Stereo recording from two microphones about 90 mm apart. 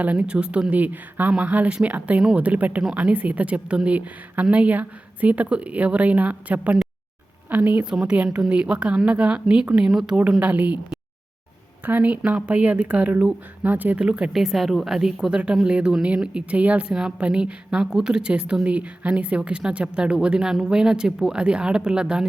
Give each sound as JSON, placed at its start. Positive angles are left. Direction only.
{"t": 0.0, "sound": "a woman's voice", "side_deg": -15}
{"t": 10.4, "sound": "a woman's voice", "side_deg": -15}